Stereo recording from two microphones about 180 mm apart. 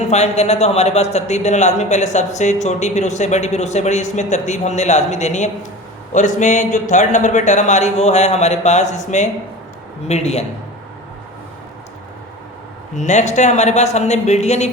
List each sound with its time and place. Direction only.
0.1 s speech: 35° left (ahead or behind)
13.0 s speech: 40° left (ahead or behind)